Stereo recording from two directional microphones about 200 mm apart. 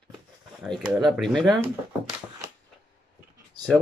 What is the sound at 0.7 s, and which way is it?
Speech, centre (ahead or behind).